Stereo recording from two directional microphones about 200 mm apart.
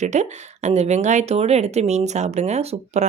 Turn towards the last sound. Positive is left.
turn(degrees=-35)  # may be behind; listen again after turning